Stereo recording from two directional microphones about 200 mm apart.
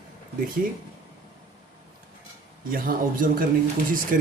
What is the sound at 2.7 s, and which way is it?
Speech, 45° right (ahead or behind).